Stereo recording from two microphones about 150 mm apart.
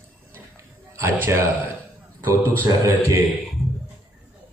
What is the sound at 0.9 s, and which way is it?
Speech, 15° right (ahead or behind).